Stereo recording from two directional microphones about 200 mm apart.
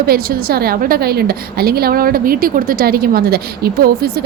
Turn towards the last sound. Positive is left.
turn(degrees=-50)  # may be behind; listen again after turning